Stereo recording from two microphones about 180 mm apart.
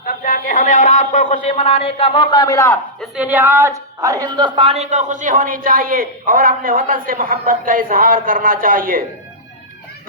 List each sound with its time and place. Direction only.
0.0 s a man's voice: 50° left (ahead or behind); by 2.7 s 20° left (ahead or behind)
3.0 s speech: 10° right (ahead or behind); by 9.0 s 50° right (ahead or behind)